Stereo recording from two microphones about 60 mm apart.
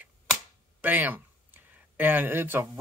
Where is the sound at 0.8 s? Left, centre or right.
Right.